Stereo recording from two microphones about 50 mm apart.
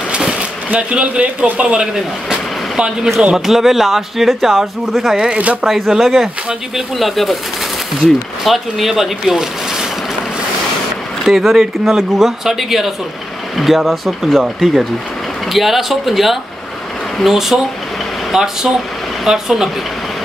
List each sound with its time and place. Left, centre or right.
0.4 s speech: right; by 5.1 s centre
5.1 s speech: centre
11.2 s speech: centre